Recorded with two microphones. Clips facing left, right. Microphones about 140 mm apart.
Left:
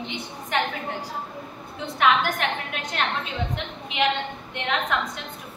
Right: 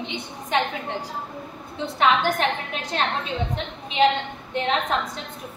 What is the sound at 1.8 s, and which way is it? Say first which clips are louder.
Speech: right 1 dB; 30° right (ahead or behind).